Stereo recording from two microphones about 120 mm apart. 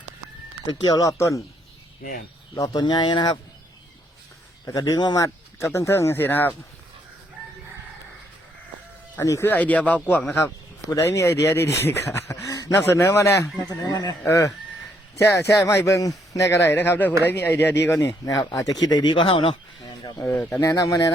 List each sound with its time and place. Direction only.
0.6 s speech: 35° left (ahead or behind)
2.6 s speech: 30° left (ahead or behind)
4.6 s speech: 30° left (ahead or behind)
9.1 s speech: 25° left (ahead or behind)
10.8 s speech: 25° left (ahead or behind)
18.9 s speech: 40° left (ahead or behind)
19.8 s a sound: 35° left (ahead or behind)
20.2 s speech: 20° left (ahead or behind)